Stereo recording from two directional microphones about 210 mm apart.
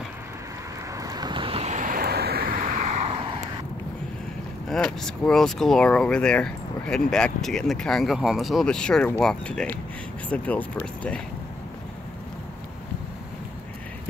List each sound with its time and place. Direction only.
0.9 s vehicle: 20° right (ahead or behind)
4.6 s speech: centre (ahead or behind)